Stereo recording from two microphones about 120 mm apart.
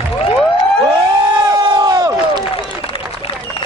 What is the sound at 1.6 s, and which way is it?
Crowd, 35° right (ahead or behind).